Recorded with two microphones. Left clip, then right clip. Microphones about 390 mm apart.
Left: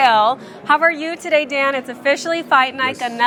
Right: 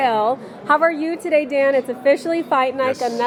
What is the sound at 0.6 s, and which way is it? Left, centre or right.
A woman's voice, centre.